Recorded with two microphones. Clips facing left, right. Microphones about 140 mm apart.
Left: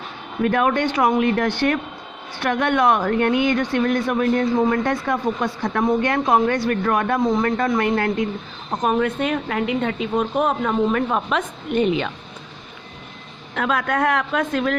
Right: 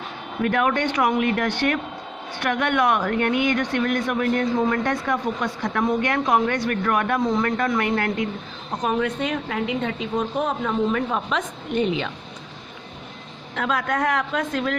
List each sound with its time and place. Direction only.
0.4 s speech: 30° left (ahead or behind)
8.8 s a woman's voice: 50° left (ahead or behind)
13.6 s a woman's voice: 60° left (ahead or behind)